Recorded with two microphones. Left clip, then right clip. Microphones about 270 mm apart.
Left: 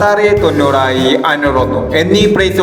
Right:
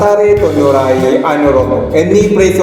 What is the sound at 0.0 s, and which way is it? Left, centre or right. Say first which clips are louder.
Music: right 2 dB; left.